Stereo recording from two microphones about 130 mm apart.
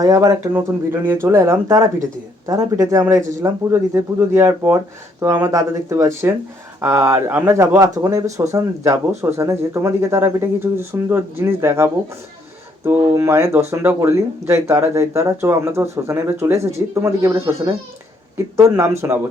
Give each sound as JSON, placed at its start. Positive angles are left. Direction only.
{"t": 0.0, "sound": "speech", "side_deg": -25}